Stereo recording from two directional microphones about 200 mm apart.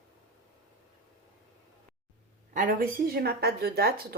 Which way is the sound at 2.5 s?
50° right (ahead or behind).